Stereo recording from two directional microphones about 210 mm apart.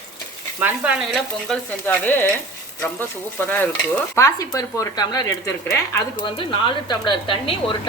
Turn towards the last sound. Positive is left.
turn(degrees=25)  # may be behind; listen again after turning